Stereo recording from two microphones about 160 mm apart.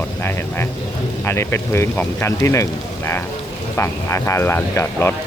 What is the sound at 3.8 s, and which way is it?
Speech, 15° left (ahead or behind).